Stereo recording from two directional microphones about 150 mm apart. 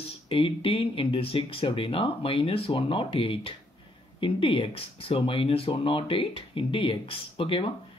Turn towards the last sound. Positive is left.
turn(degrees=35)  # may be behind; listen again after turning